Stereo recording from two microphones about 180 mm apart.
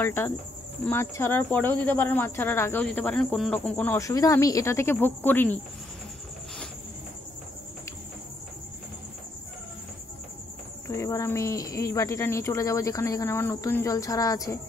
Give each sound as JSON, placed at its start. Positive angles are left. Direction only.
{"t": 0.0, "sound": "speech", "side_deg": 15}
{"t": 10.9, "sound": "speech", "side_deg": 15}